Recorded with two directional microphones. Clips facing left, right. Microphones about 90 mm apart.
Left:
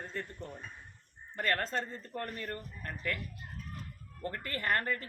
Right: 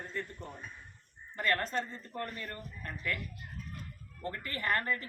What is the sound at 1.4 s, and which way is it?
Speech, 40° left (ahead or behind).